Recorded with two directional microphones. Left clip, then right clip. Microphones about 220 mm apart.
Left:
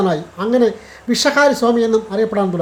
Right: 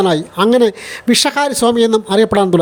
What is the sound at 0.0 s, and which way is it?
Speech, 45° right (ahead or behind).